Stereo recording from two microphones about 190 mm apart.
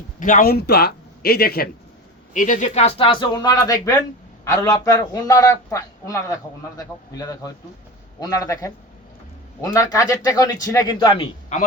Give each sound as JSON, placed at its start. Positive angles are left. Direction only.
{"t": 0.2, "sound": "a man's voice", "side_deg": 45}
{"t": 2.3, "sound": "a man's voice", "side_deg": 45}